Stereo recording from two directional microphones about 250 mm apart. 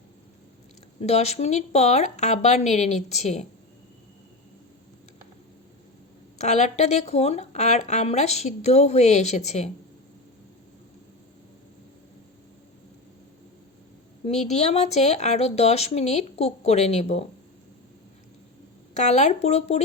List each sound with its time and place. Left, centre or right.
1.0 s speech: left
6.4 s speech: left
14.4 s speech: left
18.9 s speech: left